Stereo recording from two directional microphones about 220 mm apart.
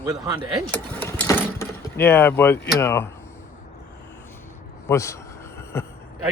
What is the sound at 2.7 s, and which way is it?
Speech, 10° left (ahead or behind).